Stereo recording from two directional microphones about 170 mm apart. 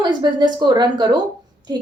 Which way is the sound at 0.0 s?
25° right (ahead or behind).